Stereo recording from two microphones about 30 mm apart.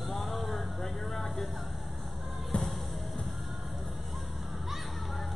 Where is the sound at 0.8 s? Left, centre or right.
Centre.